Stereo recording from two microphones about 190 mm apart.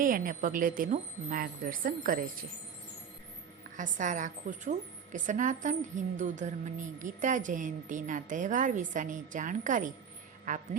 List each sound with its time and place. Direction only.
0.0 s a woman's voice: 45° right (ahead or behind)
3.8 s a woman's voice: 40° right (ahead or behind)